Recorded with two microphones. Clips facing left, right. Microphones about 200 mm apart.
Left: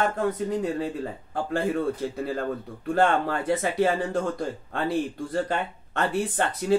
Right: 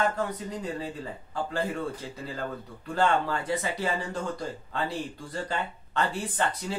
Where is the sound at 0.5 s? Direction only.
55° left (ahead or behind).